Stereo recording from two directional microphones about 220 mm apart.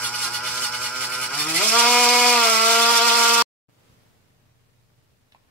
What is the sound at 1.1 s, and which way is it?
Chainsaw, 5° left (ahead or behind).